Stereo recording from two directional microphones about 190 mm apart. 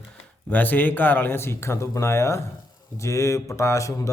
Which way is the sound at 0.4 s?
10° left (ahead or behind).